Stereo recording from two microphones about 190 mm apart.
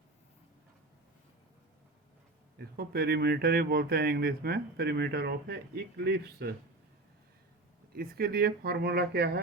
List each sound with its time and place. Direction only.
2.6 s speech: 55° right (ahead or behind)
7.9 s speech: 55° right (ahead or behind)